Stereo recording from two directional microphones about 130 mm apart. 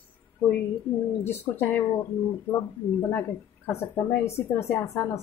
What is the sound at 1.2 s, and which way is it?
Speech, 15° left (ahead or behind).